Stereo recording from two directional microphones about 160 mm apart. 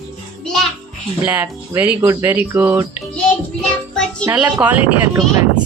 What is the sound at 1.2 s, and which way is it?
Speech, 15° right (ahead or behind).